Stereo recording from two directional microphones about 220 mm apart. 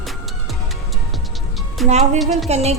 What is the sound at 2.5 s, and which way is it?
Speech, 30° right (ahead or behind).